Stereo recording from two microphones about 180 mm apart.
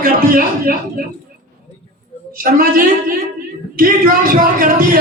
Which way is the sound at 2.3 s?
50° right (ahead or behind).